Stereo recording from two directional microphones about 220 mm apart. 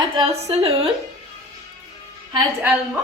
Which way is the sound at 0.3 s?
25° right (ahead or behind).